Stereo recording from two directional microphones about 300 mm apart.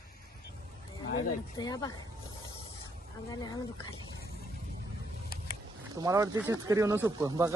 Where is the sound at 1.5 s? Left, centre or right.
Centre.